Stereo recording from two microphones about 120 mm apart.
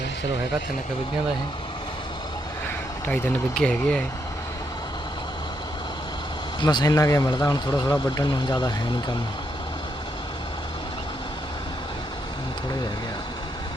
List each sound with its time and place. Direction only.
3.1 s speech: 5° left (ahead or behind)
6.6 s speech: 40° left (ahead or behind)